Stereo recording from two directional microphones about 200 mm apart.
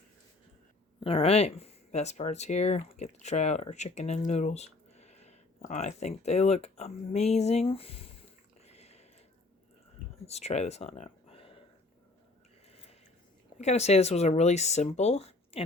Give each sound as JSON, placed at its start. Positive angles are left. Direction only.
{"t": 0.9, "sound": "speech", "side_deg": 25}
{"t": 8.6, "sound": "a sound", "side_deg": 30}
{"t": 10.2, "sound": "speech", "side_deg": 30}
{"t": 13.6, "sound": "speech", "side_deg": 35}